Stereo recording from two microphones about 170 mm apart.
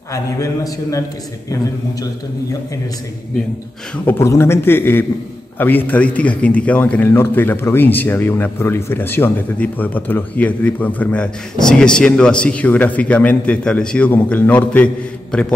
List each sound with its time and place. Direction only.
0.1 s a man's voice: 20° left (ahead or behind)
3.9 s a man's voice: 15° left (ahead or behind)